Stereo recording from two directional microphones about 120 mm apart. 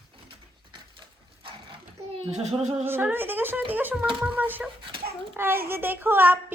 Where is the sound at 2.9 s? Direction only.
20° right (ahead or behind).